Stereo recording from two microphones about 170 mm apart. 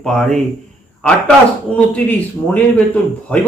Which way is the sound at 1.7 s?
5° left (ahead or behind).